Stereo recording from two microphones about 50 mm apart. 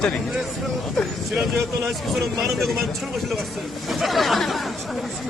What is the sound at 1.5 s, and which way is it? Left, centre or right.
Speech, centre.